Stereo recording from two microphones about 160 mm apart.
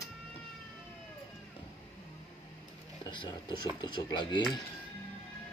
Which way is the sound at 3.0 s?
25° left (ahead or behind).